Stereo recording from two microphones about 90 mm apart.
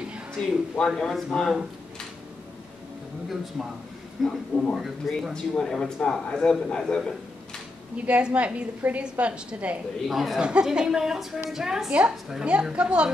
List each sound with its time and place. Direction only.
0.7 s speech: 5° left (ahead or behind)
3.6 s a man's voice: 5° right (ahead or behind)
8.0 s a woman's voice: 15° right (ahead or behind)
10.0 s a woman's voice: centre (ahead or behind)